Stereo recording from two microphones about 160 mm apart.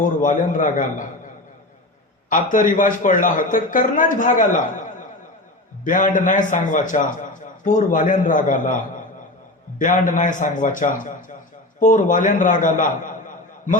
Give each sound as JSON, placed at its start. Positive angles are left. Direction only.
{"t": 0.0, "sound": "a man's voice", "side_deg": 55}
{"t": 2.3, "sound": "a man's voice", "side_deg": 55}
{"t": 5.8, "sound": "a man's voice", "side_deg": 55}